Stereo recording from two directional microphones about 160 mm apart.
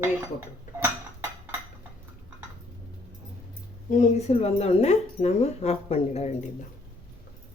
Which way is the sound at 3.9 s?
45° left (ahead or behind).